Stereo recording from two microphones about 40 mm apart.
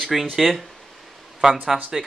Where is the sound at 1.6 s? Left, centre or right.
Centre.